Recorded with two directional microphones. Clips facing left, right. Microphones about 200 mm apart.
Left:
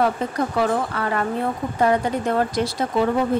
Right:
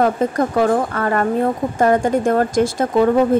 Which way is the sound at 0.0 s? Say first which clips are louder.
Right 5 dB; 45° right (ahead or behind).